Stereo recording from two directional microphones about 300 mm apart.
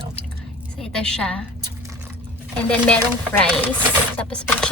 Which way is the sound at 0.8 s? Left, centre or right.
Centre.